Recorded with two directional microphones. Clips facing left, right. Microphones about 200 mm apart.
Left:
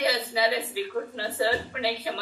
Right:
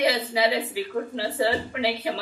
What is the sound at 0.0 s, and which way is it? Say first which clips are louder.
A woman's voice: right 3 dB; 15° right (ahead or behind).